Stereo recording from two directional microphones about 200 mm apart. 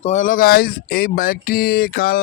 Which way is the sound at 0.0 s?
35° left (ahead or behind).